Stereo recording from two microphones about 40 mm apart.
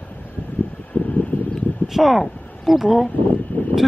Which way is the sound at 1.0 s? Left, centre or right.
Left.